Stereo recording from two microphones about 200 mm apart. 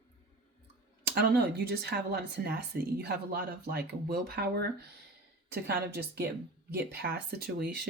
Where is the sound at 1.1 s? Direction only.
50° right (ahead or behind).